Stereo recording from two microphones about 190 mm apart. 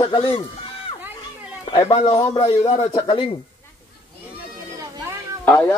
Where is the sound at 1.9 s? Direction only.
30° left (ahead or behind).